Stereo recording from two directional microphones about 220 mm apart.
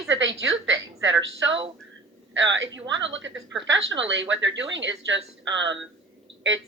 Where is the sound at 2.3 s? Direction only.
55° right (ahead or behind).